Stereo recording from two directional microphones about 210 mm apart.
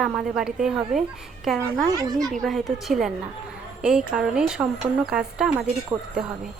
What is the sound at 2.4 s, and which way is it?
A woman's voice, centre (ahead or behind).